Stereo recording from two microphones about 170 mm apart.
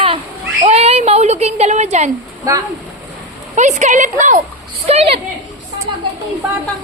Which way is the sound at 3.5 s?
45° right (ahead or behind).